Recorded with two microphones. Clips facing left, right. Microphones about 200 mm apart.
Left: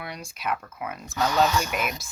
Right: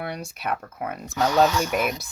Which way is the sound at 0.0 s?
65° right (ahead or behind).